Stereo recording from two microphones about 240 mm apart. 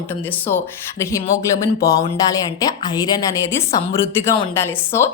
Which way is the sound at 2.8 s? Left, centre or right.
Centre.